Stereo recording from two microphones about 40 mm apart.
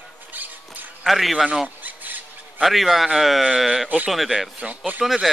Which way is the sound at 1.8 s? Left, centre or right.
Right.